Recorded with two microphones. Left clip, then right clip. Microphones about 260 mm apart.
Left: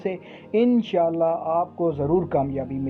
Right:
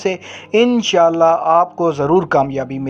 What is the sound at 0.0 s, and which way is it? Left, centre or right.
A man's voice, centre.